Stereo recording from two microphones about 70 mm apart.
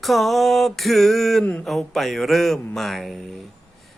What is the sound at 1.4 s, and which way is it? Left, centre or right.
Speech, centre.